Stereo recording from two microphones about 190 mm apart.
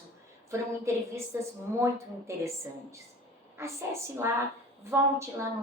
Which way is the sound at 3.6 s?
15° right (ahead or behind).